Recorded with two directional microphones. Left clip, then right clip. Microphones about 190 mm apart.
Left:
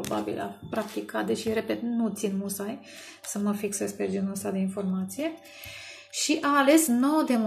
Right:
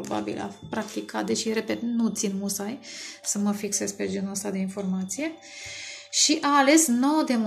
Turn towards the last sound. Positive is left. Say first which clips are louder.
# right 1 dB
turn(degrees=-5)  # may be behind; listen again after turning